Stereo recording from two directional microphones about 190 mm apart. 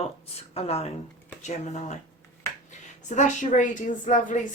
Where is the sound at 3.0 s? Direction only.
40° left (ahead or behind).